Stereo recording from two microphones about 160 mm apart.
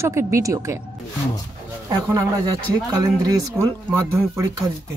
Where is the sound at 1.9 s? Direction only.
20° right (ahead or behind).